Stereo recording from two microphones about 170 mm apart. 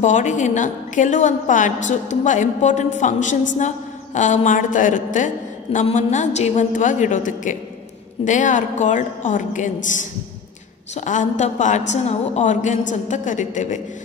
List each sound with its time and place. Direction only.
0.0 s a woman's voice: 45° left (ahead or behind)
11.0 s a woman's voice: 45° left (ahead or behind)